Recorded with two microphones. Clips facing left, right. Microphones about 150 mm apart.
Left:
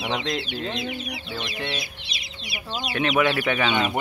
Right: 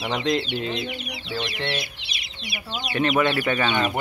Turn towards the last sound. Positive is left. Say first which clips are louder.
# even
turn(degrees=5)  # may be behind; listen again after turning